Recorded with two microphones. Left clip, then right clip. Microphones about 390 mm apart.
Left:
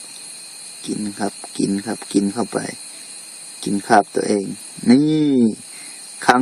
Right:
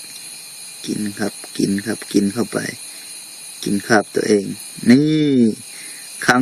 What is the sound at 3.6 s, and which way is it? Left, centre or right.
Speech, centre.